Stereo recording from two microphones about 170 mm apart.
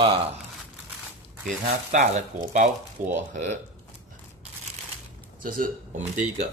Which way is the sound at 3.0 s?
50° right (ahead or behind).